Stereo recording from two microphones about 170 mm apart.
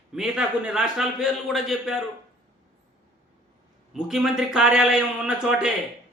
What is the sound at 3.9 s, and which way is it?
A man's voice, 5° right (ahead or behind).